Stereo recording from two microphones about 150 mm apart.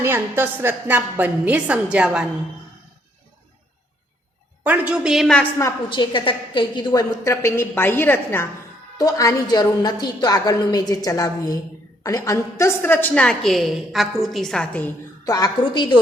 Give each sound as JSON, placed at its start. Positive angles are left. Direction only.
{"t": 0.0, "sound": "a woman's voice", "side_deg": -15}
{"t": 4.6, "sound": "a woman's voice", "side_deg": -10}
{"t": 5.9, "sound": "a woman's voice", "side_deg": 35}
{"t": 15.2, "sound": "a woman's voice", "side_deg": 25}